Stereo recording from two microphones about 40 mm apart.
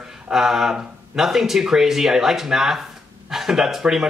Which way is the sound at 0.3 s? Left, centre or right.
Centre.